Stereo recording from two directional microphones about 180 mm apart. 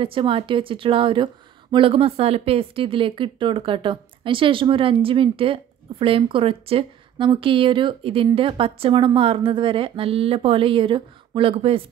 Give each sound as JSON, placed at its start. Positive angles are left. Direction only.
{"t": 0.0, "sound": "speech", "side_deg": -30}